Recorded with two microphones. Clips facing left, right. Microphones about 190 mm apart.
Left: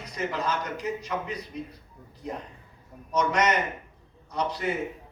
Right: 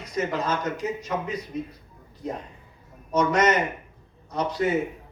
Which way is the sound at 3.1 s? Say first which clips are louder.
Right 4 dB; 50° right (ahead or behind).